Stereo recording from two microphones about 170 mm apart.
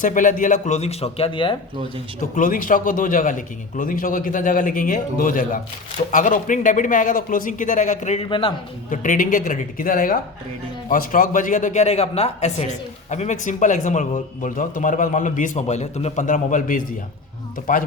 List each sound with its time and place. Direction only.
0.0 s a man's voice: 50° left (ahead or behind); by 1.5 s 30° left (ahead or behind)
2.3 s a man's voice: 50° left (ahead or behind); by 8.5 s 30° left (ahead or behind)
8.9 s a man's voice: 55° left (ahead or behind)